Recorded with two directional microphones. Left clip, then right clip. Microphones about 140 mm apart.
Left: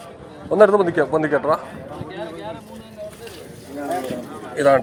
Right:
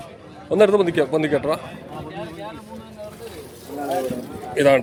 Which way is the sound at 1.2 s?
60° right (ahead or behind).